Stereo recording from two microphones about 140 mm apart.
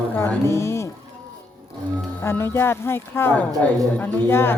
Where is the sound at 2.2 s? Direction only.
15° left (ahead or behind).